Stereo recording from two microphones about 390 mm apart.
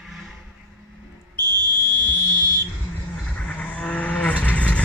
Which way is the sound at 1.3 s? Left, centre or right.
Right.